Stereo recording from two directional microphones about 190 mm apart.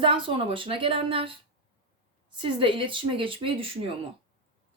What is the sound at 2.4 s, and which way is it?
A woman's voice, 25° right (ahead or behind).